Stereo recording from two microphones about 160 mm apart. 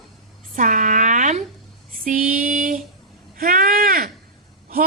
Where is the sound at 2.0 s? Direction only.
55° right (ahead or behind).